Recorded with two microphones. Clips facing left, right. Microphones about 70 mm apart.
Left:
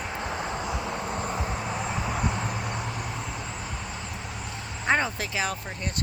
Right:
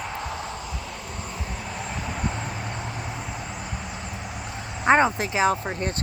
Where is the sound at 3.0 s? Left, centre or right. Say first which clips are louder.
Right 1 dB; centre.